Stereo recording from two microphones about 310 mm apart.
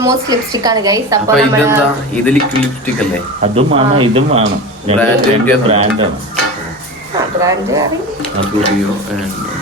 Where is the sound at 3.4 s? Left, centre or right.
Centre.